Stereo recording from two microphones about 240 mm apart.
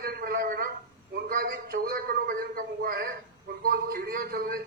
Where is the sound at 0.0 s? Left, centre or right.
Right.